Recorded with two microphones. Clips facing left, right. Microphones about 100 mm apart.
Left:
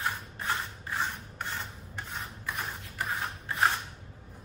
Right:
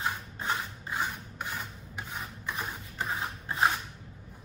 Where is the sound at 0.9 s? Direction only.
10° right (ahead or behind).